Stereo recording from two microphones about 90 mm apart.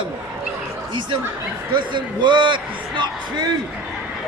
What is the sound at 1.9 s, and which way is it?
Speech, 60° right (ahead or behind).